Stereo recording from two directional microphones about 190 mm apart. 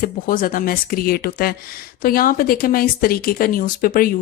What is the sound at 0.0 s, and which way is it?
Speech, 45° left (ahead or behind).